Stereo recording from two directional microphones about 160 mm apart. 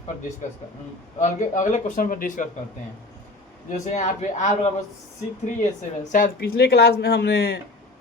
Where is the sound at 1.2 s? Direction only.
50° left (ahead or behind).